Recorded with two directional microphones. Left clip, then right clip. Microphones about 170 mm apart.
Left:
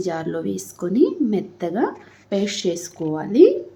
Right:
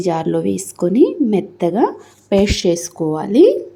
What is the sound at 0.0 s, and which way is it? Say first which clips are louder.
A woman's voice: right 7 dB; 30° right (ahead or behind).